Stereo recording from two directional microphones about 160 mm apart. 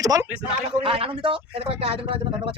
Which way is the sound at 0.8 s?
35° right (ahead or behind).